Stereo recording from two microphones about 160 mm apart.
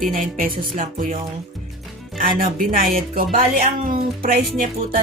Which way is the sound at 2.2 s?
60° right (ahead or behind).